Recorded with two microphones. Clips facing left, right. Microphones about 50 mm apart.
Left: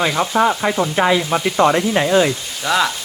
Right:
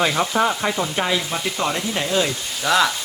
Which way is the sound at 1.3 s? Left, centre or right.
Left.